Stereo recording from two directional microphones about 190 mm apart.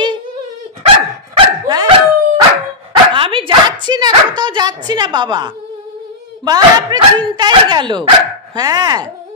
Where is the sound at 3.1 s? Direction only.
30° right (ahead or behind).